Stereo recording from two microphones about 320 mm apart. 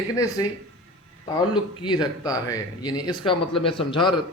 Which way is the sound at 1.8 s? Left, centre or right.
Centre.